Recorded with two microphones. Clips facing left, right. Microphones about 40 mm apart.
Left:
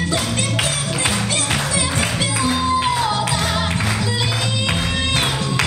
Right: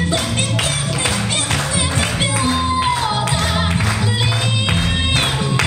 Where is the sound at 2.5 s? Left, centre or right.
Centre.